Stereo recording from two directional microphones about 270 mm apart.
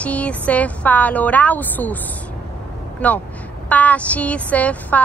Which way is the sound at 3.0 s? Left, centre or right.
Centre.